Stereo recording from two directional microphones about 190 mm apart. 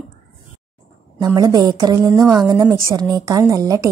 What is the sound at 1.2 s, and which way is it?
A woman's voice, 20° right (ahead or behind).